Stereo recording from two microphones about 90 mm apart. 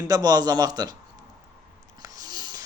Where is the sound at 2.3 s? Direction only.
50° right (ahead or behind).